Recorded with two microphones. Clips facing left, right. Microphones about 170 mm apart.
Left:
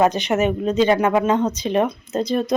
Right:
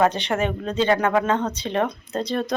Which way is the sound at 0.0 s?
10° left (ahead or behind).